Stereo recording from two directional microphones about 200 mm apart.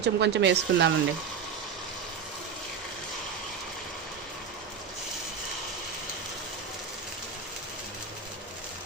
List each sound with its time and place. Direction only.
0.0 s speech: 60° right (ahead or behind)